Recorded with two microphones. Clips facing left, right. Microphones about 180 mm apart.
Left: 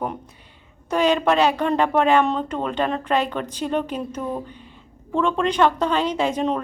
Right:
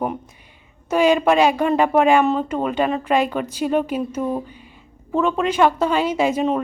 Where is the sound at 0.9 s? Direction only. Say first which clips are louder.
Right 3 dB; 10° right (ahead or behind).